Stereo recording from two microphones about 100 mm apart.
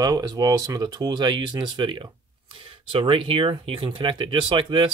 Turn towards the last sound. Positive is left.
turn(degrees=-55)  # may be behind; listen again after turning